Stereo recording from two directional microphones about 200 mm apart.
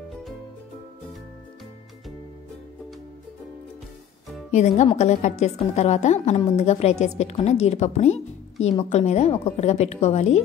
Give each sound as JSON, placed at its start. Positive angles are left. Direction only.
{"t": 4.5, "sound": "a woman's voice", "side_deg": 35}